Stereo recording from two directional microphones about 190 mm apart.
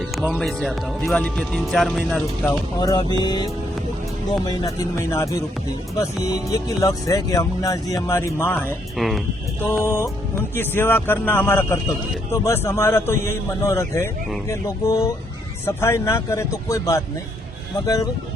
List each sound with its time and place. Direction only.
0.0 s a man's voice: centre (ahead or behind)
9.0 s speech: centre (ahead or behind)
9.6 s a man's voice: 10° left (ahead or behind)